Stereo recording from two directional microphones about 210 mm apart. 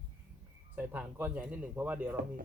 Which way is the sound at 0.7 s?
10° right (ahead or behind).